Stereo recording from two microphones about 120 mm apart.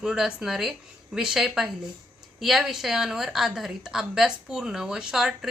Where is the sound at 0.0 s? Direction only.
5° right (ahead or behind).